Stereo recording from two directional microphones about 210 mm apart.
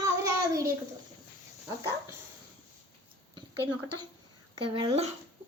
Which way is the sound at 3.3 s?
20° right (ahead or behind).